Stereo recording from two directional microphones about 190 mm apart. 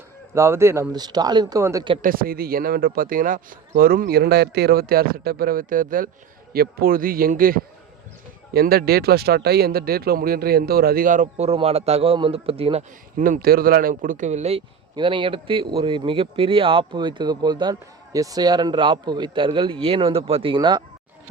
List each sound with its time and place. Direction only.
0.3 s speech: 15° right (ahead or behind)
2.0 s speech: 50° right (ahead or behind); by 13.2 s 30° right (ahead or behind)
13.2 s speech: 50° right (ahead or behind); by 20.8 s 25° right (ahead or behind)